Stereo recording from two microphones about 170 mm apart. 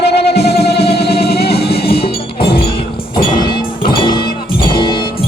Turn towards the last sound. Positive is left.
turn(degrees=30)  # may be behind; listen again after turning